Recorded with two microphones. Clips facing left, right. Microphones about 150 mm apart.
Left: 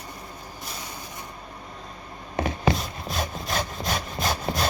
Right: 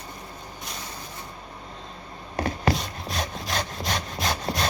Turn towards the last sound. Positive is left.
turn(degrees=0)  # may be behind; listen again after turning